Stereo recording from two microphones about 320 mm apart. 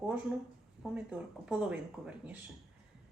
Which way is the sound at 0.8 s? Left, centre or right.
Centre.